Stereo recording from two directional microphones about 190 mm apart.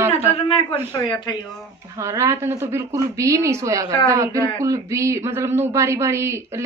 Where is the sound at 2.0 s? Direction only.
15° right (ahead or behind).